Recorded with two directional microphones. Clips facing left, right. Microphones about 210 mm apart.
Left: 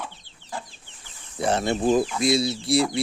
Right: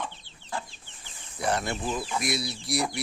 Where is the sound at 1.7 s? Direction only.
35° left (ahead or behind).